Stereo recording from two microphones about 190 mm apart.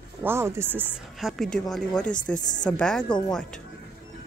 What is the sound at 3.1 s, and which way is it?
Speech, 25° left (ahead or behind).